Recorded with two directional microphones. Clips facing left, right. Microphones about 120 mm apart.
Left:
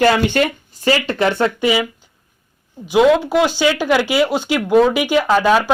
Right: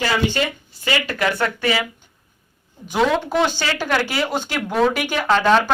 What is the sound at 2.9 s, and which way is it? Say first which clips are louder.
Speech: left 6 dB; 10° left (ahead or behind).